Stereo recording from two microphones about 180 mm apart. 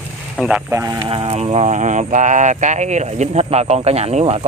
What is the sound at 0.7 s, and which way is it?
Speech, 15° right (ahead or behind).